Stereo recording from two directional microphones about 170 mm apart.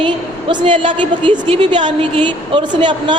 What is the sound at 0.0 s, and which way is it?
A woman's voice, 30° right (ahead or behind).